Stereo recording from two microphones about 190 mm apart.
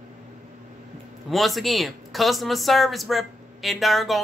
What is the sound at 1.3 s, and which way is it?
Speech, centre (ahead or behind).